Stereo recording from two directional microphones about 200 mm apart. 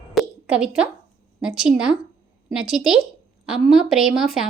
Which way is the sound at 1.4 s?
5° right (ahead or behind).